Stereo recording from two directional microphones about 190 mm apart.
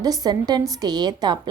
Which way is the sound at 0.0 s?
20° right (ahead or behind).